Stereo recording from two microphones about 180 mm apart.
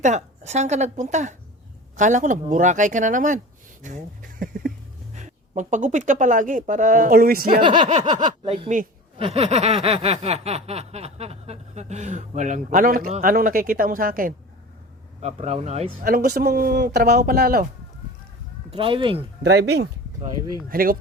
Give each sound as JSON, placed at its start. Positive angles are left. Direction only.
{"t": 0.0, "sound": "snicker", "side_deg": -40}
{"t": 2.0, "sound": "speech", "side_deg": -45}
{"t": 7.8, "sound": "snicker", "side_deg": -40}
{"t": 8.0, "sound": "speech", "side_deg": -25}
{"t": 9.1, "sound": "snicker", "side_deg": -35}
{"t": 13.2, "sound": "speech", "side_deg": -50}
{"t": 15.2, "sound": "snicker", "side_deg": -35}
{"t": 16.0, "sound": "speech", "side_deg": -55}
{"t": 18.7, "sound": "speech", "side_deg": -30}
{"t": 19.4, "sound": "speech", "side_deg": -70}
{"t": 20.7, "sound": "speech", "side_deg": -50}